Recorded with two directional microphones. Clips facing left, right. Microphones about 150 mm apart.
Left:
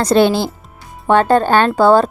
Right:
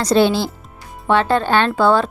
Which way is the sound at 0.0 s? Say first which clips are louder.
Left 2 dB; 55° left (ahead or behind).